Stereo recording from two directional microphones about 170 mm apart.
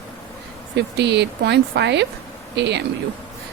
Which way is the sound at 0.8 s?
90° right.